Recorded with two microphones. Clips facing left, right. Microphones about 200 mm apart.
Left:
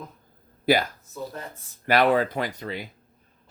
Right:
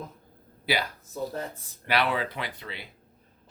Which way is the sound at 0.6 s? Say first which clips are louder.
Left 8 dB; 45° left (ahead or behind).